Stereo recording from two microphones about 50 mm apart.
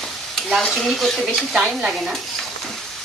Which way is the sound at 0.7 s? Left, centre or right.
Centre.